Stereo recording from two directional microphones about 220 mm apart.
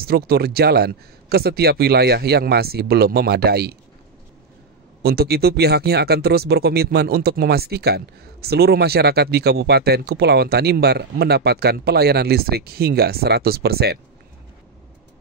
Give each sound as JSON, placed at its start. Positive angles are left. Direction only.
{"t": 0.0, "sound": "speech", "side_deg": -45}
{"t": 5.0, "sound": "speech", "side_deg": -45}